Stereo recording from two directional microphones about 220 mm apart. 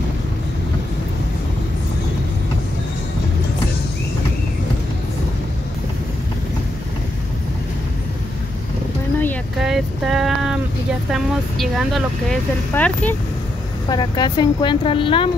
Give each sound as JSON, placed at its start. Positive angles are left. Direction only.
{"t": 9.6, "sound": "boat", "side_deg": 0}
{"t": 11.1, "sound": "speech", "side_deg": 0}
{"t": 13.8, "sound": "speech", "side_deg": 20}